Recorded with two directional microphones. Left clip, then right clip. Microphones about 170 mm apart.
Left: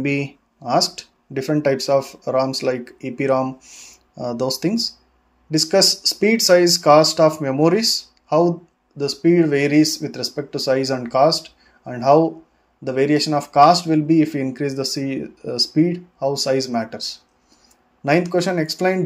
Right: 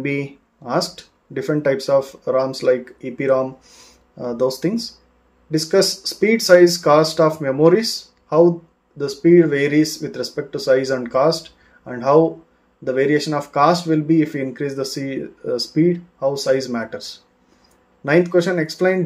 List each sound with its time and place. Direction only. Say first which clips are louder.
0.0 s speech: left 1 dB; 40° left (ahead or behind)